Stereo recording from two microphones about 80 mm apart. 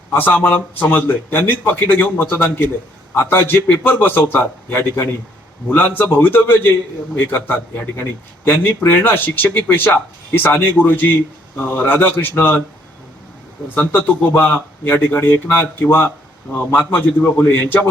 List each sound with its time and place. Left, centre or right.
0.1 s speech: left
13.7 s speech: left